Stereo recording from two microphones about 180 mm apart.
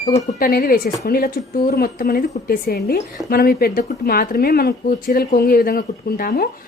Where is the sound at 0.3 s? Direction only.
55° left (ahead or behind).